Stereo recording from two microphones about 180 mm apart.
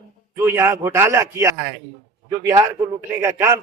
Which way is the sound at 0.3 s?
15° right (ahead or behind).